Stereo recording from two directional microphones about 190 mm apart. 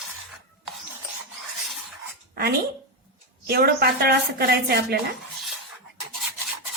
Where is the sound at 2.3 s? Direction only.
55° right (ahead or behind).